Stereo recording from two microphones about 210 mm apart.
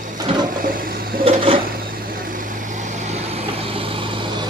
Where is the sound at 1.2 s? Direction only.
25° right (ahead or behind).